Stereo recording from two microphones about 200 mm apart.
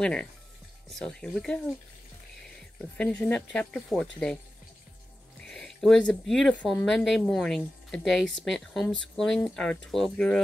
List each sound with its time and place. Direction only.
0.0 s speech: 5° left (ahead or behind)
3.0 s speech: 5° left (ahead or behind)
5.4 s speech: 5° left (ahead or behind)